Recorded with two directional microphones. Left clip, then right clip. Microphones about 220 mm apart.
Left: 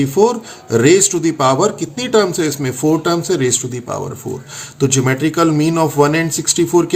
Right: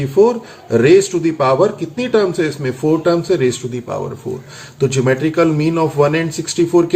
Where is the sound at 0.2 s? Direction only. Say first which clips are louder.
Right 2 dB; 45° left (ahead or behind).